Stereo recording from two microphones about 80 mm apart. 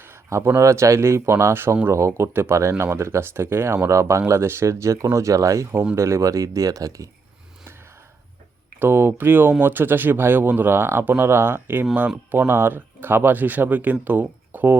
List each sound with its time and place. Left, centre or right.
0.0 s speech: right
8.8 s speech: right